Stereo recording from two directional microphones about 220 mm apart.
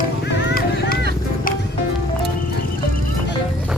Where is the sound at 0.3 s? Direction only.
45° left (ahead or behind).